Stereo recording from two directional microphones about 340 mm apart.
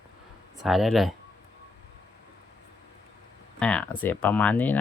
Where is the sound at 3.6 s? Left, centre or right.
Centre.